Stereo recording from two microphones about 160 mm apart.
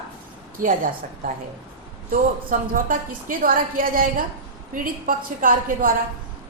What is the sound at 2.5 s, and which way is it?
A woman's voice, 55° right (ahead or behind).